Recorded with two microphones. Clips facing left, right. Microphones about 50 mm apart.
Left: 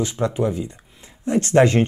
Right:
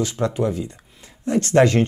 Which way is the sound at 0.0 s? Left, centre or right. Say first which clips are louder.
Even; centre.